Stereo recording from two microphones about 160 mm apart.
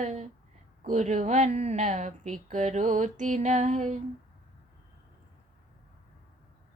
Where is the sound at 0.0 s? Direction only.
45° right (ahead or behind).